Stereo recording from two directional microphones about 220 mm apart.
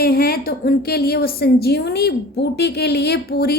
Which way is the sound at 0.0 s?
45° left (ahead or behind).